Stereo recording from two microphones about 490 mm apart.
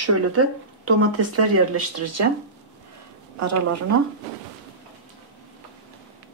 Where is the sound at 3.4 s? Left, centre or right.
Right.